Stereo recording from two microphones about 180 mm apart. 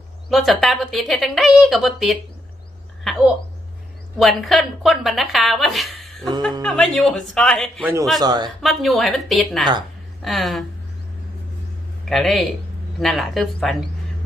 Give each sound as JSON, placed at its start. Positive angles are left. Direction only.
{"t": 0.3, "sound": "speech", "side_deg": 0}
{"t": 3.0, "sound": "a sound", "side_deg": 0}
{"t": 4.2, "sound": "speech", "side_deg": 0}
{"t": 8.2, "sound": "a man's voice", "side_deg": -20}
{"t": 8.6, "sound": "speech", "side_deg": 0}
{"t": 12.0, "sound": "speech", "side_deg": 0}